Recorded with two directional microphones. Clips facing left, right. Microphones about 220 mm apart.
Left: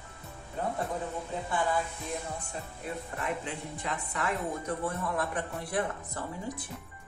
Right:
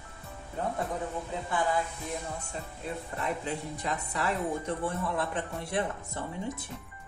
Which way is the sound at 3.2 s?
40° right (ahead or behind).